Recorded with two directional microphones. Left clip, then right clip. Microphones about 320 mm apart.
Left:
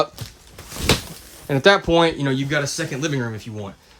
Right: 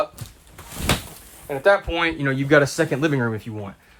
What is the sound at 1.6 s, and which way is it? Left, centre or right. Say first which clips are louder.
Speech: left 2 dB; left.